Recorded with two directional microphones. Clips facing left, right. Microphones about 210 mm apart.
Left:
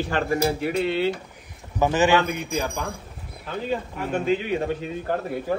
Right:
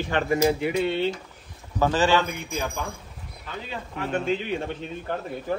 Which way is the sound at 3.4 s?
45° left (ahead or behind).